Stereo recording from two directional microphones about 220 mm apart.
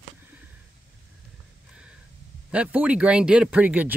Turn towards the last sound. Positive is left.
turn(degrees=-5)  # may be behind; listen again after turning